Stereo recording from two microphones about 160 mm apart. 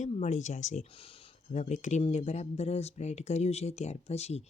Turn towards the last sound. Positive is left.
turn(degrees=40)  # may be behind; listen again after turning